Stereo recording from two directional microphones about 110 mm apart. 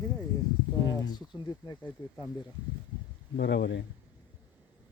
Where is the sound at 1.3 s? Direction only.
35° left (ahead or behind).